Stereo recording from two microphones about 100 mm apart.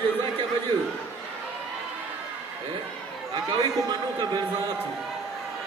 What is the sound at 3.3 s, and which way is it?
A man's voice, 40° right (ahead or behind).